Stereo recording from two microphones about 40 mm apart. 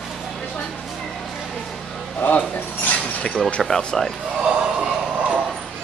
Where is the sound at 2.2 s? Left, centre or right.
Left.